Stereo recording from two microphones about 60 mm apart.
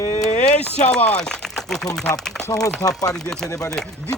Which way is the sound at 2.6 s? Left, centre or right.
Left.